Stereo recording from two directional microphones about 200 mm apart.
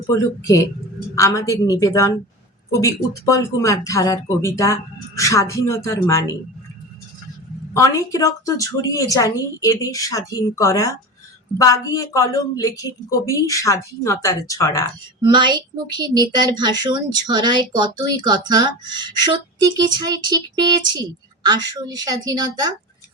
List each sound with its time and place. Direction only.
0.1 s speech: 15° left (ahead or behind)
7.7 s speech: 15° left (ahead or behind)
15.2 s speech: 20° right (ahead or behind)